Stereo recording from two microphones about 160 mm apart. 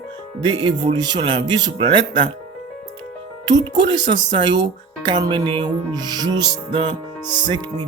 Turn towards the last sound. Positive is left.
turn(degrees=-30)  # may be behind; listen again after turning